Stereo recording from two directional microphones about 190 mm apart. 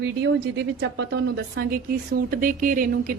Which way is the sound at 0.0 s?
65° right (ahead or behind).